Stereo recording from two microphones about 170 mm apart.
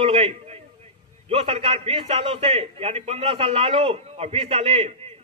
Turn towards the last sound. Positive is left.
turn(degrees=-35)  # may be behind; listen again after turning